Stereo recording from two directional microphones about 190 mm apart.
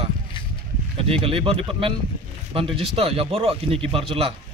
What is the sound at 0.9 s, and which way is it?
Speech, 30° right (ahead or behind).